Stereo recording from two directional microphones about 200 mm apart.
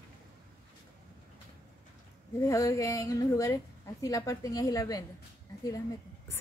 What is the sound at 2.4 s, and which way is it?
A woman's voice, 15° left (ahead or behind).